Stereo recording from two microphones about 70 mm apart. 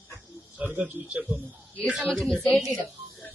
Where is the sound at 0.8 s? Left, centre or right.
Right.